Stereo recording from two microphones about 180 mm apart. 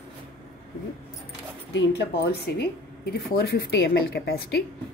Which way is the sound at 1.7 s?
65° left (ahead or behind).